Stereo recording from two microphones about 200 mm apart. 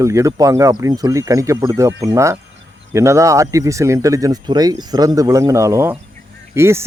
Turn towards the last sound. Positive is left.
turn(degrees=-10)  # may be behind; listen again after turning